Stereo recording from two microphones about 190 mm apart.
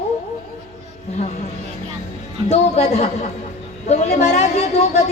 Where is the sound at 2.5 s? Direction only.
35° left (ahead or behind).